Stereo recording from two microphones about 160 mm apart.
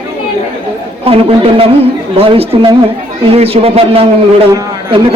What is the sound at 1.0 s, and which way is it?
A man's voice, 35° right (ahead or behind).